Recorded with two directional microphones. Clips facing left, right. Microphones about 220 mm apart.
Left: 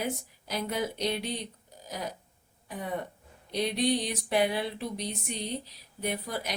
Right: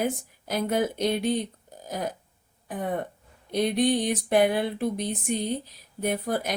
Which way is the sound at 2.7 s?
50° right (ahead or behind).